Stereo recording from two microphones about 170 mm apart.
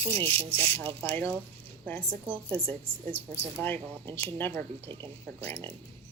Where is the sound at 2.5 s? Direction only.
30° right (ahead or behind).